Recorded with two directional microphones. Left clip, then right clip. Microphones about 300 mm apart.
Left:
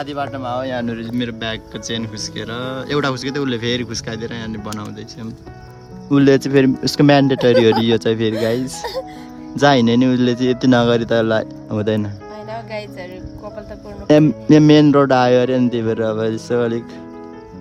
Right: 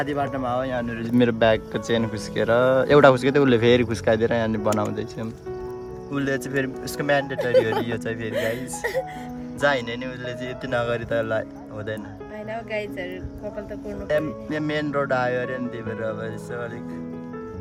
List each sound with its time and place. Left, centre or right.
0.0 s speech: centre
0.6 s speech: left
1.1 s speech: centre
6.1 s speech: left
8.6 s speech: centre
12.5 s music: centre
14.1 s speech: left